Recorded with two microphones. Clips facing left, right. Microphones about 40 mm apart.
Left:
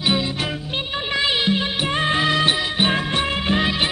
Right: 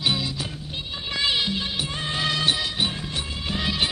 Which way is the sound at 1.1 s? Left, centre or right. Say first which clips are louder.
Left 4 dB; left.